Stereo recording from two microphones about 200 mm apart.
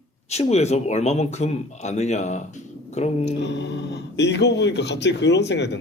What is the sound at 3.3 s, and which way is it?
Speech, 60° left (ahead or behind).